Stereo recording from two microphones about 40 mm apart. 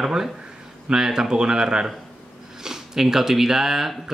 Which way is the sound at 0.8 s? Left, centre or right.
Centre.